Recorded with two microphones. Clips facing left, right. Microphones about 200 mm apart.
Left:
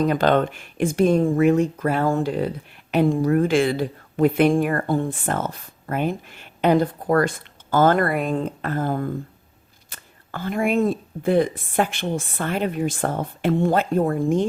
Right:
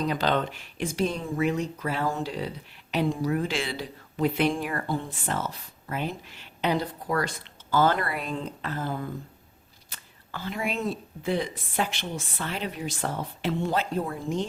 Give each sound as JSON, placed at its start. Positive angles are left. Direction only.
{"t": 0.0, "sound": "speech", "side_deg": 55}